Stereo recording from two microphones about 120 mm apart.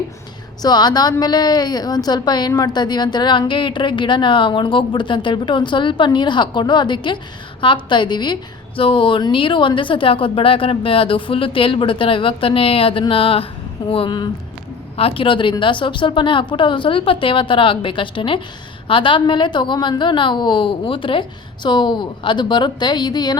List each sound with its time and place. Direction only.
0.6 s a woman's voice: 35° left (ahead or behind)